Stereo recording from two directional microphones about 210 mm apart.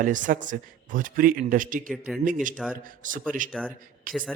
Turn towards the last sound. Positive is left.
turn(degrees=-40)  # may be behind; listen again after turning